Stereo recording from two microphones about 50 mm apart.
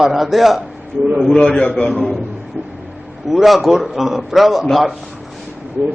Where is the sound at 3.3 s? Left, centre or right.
Centre.